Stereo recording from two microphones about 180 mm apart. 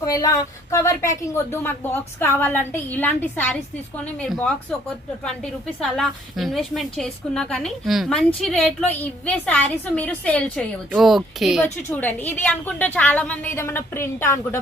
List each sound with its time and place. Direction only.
0.0 s a woman's voice: 20° left (ahead or behind); by 4.5 s 5° left (ahead or behind)
5.8 s a woman's voice: centre (ahead or behind)
11.9 s speech: 10° left (ahead or behind)